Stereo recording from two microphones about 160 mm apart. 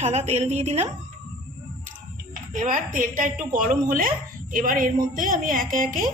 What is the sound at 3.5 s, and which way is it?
A woman's voice, 55° right (ahead or behind).